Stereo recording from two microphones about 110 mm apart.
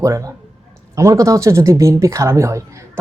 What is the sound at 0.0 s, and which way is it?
Speech, 30° right (ahead or behind).